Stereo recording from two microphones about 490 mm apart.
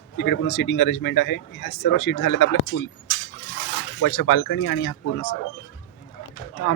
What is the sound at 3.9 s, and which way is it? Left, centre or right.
Speech, left.